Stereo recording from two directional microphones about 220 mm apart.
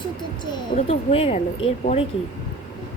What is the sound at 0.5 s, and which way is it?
Speech, 25° left (ahead or behind).